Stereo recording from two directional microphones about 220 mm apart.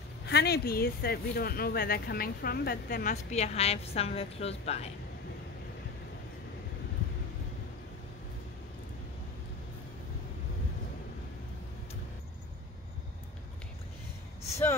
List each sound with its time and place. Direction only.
0.3 s speech: 45° left (ahead or behind); by 4.8 s 30° left (ahead or behind)